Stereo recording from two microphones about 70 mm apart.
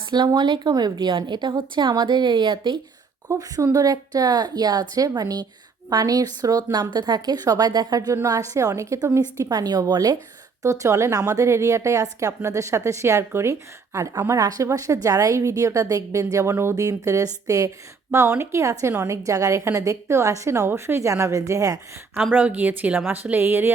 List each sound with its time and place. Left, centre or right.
0.3 s a woman's voice: right
3.3 s a woman's voice: right
8.1 s a woman's voice: right
9.5 s a woman's voice: right
10.6 s a woman's voice: right
22.3 s a woman's voice: right